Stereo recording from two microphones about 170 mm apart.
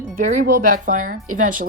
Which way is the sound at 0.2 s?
55° right (ahead or behind).